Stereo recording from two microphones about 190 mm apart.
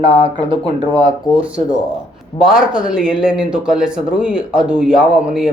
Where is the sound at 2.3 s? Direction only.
5° right (ahead or behind).